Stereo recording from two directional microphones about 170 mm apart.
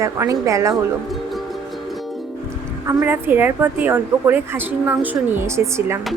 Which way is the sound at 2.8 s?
10° right (ahead or behind).